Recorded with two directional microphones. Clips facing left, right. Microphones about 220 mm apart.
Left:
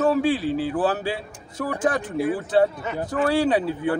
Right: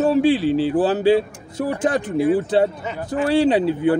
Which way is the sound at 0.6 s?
25° right (ahead or behind).